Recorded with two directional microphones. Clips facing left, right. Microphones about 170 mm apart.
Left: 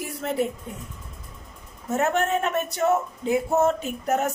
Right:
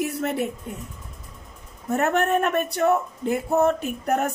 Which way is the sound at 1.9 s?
60° right (ahead or behind).